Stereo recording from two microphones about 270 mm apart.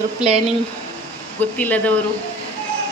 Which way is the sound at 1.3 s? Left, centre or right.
Centre.